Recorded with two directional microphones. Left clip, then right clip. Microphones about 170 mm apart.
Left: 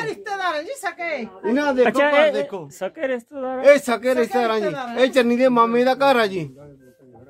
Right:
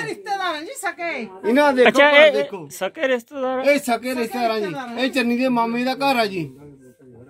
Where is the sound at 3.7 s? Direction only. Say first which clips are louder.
Left 3 dB; 20° left (ahead or behind).